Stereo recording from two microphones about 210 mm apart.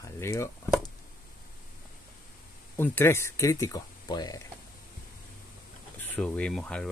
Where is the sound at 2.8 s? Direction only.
10° left (ahead or behind).